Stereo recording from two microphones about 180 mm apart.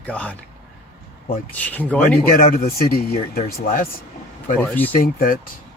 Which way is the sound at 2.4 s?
55° left (ahead or behind).